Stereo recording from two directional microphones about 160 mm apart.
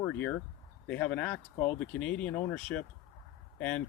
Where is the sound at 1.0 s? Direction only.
10° left (ahead or behind).